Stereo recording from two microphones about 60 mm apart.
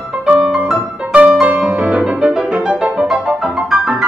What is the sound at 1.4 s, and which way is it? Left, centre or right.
Music, centre.